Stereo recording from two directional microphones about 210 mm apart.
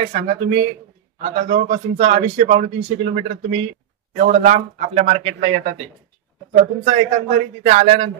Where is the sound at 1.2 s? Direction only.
30° right (ahead or behind).